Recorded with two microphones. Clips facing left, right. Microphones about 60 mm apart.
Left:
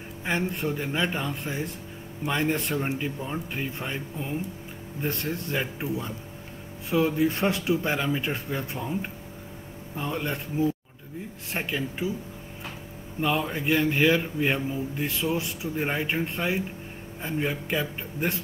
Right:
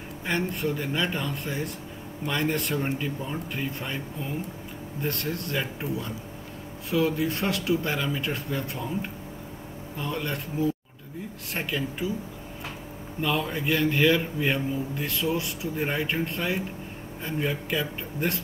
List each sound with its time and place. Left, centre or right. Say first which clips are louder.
0.2 s speech: even; centre
9.9 s speech: left 1 dB; centre
13.2 s speech: left 1 dB; centre